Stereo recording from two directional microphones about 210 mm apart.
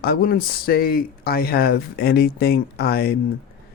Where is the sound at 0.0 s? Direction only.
45° left (ahead or behind).